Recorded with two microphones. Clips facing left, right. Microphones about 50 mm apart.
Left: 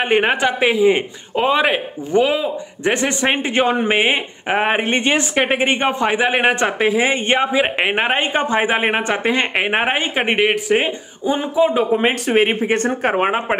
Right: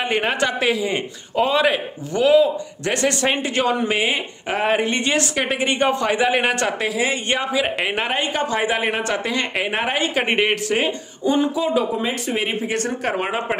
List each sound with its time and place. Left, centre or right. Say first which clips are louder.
0.0 s a man's voice: left 4 dB; left
10.2 s speech: left 3 dB; centre
12.0 s speech: left 7 dB; left